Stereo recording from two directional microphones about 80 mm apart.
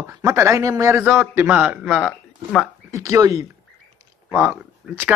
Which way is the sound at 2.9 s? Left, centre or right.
Right.